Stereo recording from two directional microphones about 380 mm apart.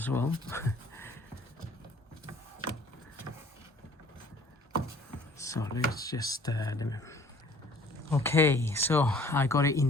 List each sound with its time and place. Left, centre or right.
0.0 s speech: centre
5.4 s speech: centre